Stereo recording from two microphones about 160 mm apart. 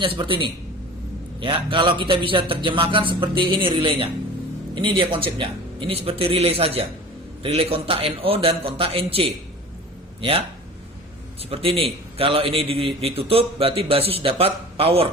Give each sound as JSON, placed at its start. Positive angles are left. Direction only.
{"t": 0.0, "sound": "a man's voice", "side_deg": -30}
{"t": 11.4, "sound": "a man's voice", "side_deg": -35}